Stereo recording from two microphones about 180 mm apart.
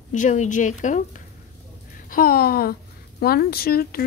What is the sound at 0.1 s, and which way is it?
Speech, 45° left (ahead or behind).